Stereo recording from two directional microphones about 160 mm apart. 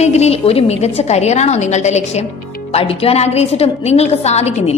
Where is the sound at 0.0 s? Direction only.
45° left (ahead or behind).